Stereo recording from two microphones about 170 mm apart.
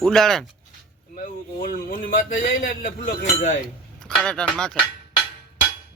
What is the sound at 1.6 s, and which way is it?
Speech, 55° left (ahead or behind).